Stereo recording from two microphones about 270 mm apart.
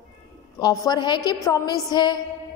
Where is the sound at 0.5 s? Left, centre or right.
Centre.